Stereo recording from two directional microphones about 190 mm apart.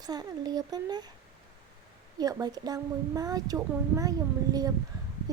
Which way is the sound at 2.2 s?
20° right (ahead or behind).